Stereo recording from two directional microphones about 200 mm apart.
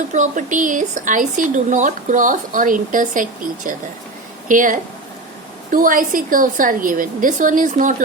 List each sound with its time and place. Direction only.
0.1 s a woman's voice: 35° right (ahead or behind)